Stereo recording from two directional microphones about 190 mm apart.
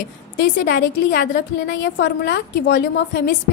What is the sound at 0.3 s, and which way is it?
A woman's voice, 60° left (ahead or behind).